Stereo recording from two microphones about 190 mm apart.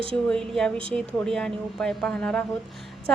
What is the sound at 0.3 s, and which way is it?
A woman's voice, 5° left (ahead or behind).